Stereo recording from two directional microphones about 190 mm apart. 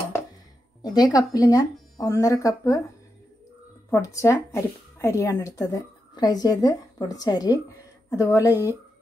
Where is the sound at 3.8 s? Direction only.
15° left (ahead or behind).